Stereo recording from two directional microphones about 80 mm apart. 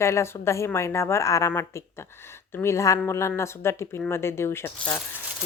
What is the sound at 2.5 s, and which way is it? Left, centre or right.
Speech, left.